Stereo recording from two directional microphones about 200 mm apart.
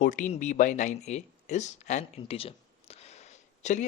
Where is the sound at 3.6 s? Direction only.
40° left (ahead or behind).